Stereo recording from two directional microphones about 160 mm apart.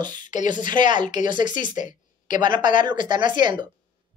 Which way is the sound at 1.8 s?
55° left (ahead or behind).